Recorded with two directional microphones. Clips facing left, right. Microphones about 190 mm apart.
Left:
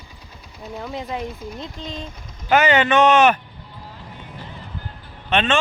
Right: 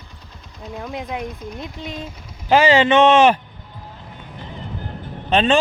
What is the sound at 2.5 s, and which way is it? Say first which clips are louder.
Speech: right 3 dB; 30° right (ahead or behind).